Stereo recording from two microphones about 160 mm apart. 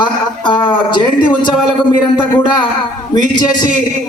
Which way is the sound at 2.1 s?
30° left (ahead or behind).